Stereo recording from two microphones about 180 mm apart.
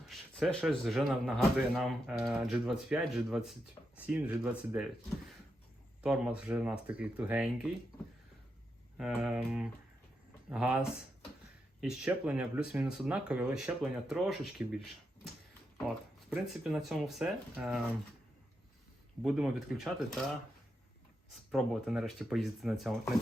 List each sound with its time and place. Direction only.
0.0 s a man's voice: centre (ahead or behind)
6.0 s speech: 5° right (ahead or behind)
9.0 s a man's voice: 5° right (ahead or behind)
16.3 s a man's voice: centre (ahead or behind)
19.2 s a man's voice: 5° right (ahead or behind)
21.5 s a man's voice: centre (ahead or behind)